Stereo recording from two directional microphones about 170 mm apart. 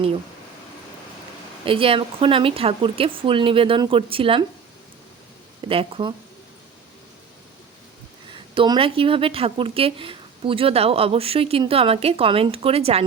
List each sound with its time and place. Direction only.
1.6 s speech: 30° right (ahead or behind)
5.6 s speech: 30° right (ahead or behind)
8.3 s speech: 25° right (ahead or behind)